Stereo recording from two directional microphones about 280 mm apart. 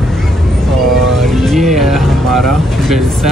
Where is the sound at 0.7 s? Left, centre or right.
Centre.